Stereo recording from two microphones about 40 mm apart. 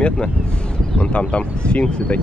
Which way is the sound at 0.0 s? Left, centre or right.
Left.